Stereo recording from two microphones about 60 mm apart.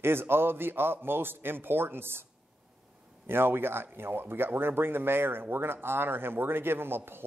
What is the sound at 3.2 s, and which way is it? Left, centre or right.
A man's voice, right.